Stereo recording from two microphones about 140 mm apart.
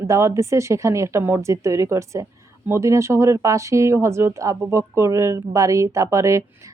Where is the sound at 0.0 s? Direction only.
20° right (ahead or behind).